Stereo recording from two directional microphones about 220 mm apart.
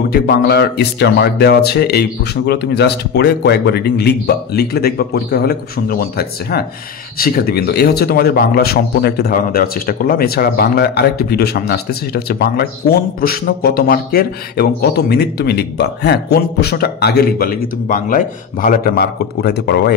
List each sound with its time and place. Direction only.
0.1 s a man's voice: 45° left (ahead or behind)